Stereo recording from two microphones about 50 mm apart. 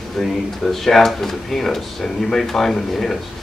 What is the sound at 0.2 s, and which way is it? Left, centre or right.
Speech, centre.